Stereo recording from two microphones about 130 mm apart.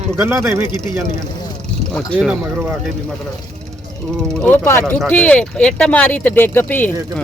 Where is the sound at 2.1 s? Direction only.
10° right (ahead or behind).